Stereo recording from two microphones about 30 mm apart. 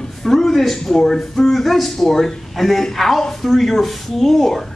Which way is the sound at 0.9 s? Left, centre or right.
Centre.